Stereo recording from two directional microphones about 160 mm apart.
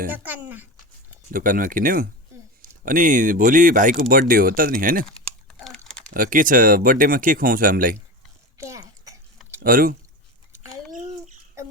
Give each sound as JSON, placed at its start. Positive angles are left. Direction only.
{"t": 0.1, "sound": "a sound", "side_deg": -10}
{"t": 1.3, "sound": "speech", "side_deg": -60}
{"t": 5.0, "sound": "typing", "side_deg": 5}
{"t": 6.1, "sound": "speech", "side_deg": -60}
{"t": 8.5, "sound": "a sound", "side_deg": -20}
{"t": 9.6, "sound": "speech", "side_deg": -65}